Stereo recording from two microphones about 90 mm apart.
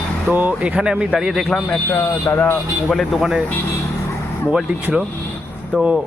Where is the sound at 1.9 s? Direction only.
20° left (ahead or behind).